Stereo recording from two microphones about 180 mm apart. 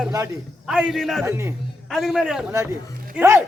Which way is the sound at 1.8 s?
Centre (ahead or behind).